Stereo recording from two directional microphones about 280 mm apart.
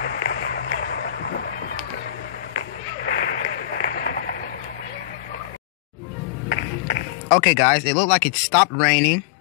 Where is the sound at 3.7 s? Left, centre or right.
Left.